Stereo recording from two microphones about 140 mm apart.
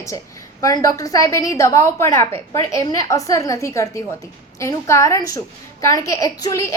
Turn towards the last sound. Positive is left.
turn(degrees=20)  # may be behind; listen again after turning